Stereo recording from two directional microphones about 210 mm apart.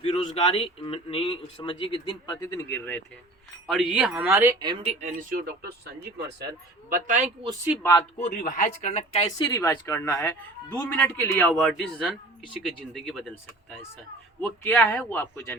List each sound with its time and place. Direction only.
0.0 s a man's voice: 25° left (ahead or behind)
3.7 s speech: centre (ahead or behind)
4.6 s speech: 25° right (ahead or behind); by 6.5 s 50° right (ahead or behind)
6.9 s speech: 35° right (ahead or behind)
7.8 s a man's voice: 15° left (ahead or behind)
8.2 s speech: 40° left (ahead or behind)
9.2 s a man's voice: 20° left (ahead or behind)